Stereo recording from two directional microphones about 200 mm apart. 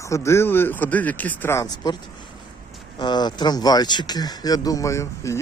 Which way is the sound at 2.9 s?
20° left (ahead or behind).